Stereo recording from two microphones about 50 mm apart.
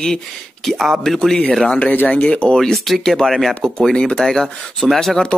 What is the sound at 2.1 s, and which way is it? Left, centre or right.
Speech, left.